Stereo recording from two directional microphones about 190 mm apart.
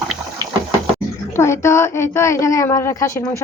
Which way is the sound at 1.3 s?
15° left (ahead or behind).